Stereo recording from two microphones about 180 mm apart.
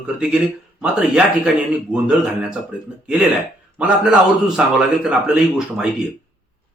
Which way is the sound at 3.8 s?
5° right (ahead or behind).